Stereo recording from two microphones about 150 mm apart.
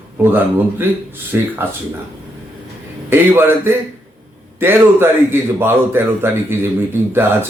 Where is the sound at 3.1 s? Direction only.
15° right (ahead or behind).